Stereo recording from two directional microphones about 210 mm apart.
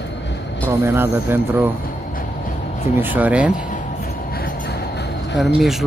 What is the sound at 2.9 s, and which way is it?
Speech, 10° right (ahead or behind).